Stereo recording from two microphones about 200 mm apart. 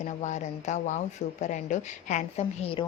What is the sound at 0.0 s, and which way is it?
Speech, 35° left (ahead or behind).